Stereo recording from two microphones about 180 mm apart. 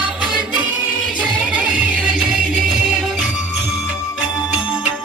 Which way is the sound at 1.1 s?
5° right (ahead or behind).